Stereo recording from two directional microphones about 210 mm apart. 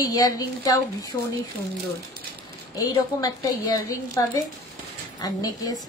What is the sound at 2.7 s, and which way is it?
A woman's voice, 15° left (ahead or behind).